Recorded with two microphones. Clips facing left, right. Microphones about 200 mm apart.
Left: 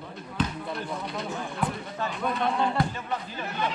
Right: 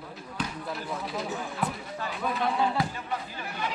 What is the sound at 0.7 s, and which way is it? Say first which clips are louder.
Speech: left 1 dB; centre (ahead or behind).